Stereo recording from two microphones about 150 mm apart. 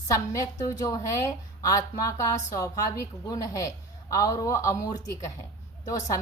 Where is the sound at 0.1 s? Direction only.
20° left (ahead or behind).